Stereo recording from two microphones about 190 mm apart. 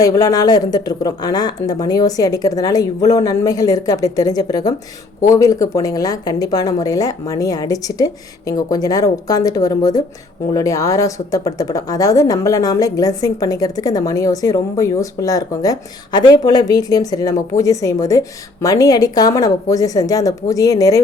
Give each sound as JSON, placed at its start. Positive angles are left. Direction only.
{"t": 0.0, "sound": "speech", "side_deg": 20}